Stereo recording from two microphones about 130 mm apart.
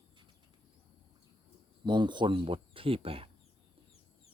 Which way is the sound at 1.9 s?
35° right (ahead or behind).